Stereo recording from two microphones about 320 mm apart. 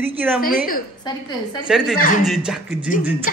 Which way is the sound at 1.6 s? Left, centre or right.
Centre.